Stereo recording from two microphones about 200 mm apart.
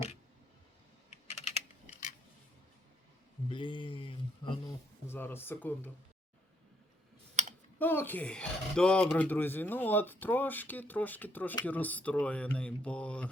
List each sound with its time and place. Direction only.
3.5 s a sound: 25° left (ahead or behind)
5.0 s speech: 10° left (ahead or behind)
7.4 s clicking: 35° right (ahead or behind)
7.8 s speech: 10° left (ahead or behind)